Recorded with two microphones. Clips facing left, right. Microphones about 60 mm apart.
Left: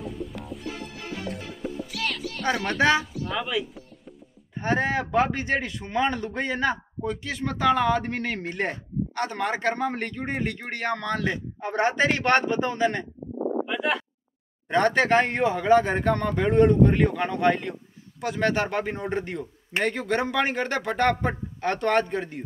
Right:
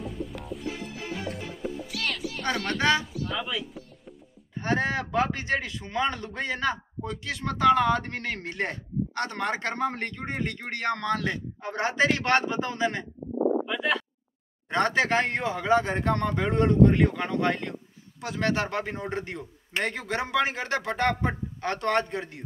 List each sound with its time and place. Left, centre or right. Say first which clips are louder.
0.0 s music: left 1 dB; centre
2.4 s speech: left 3 dB; centre
4.6 s a man's voice: left 2 dB; centre
13.7 s speech: left 1 dB; centre
14.7 s a man's voice: left 3 dB; centre